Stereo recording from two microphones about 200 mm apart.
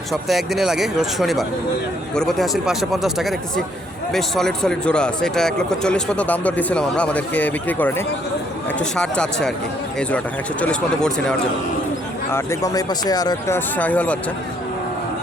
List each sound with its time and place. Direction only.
0.1 s speech: centre (ahead or behind)
10.6 s speech: 5° left (ahead or behind)
12.3 s speech: 15° left (ahead or behind)
13.7 s speech: 10° left (ahead or behind)